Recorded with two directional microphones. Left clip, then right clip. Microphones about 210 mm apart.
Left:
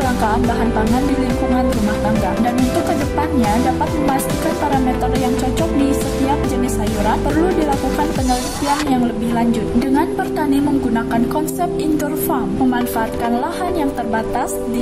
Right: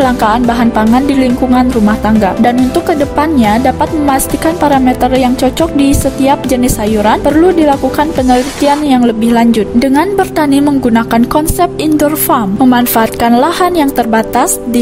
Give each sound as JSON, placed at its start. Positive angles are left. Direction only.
{"t": 0.2, "sound": "a woman's voice", "side_deg": -45}
{"t": 5.6, "sound": "a woman's voice", "side_deg": -45}
{"t": 8.2, "sound": "speech", "side_deg": 0}
{"t": 8.9, "sound": "a woman's voice", "side_deg": -45}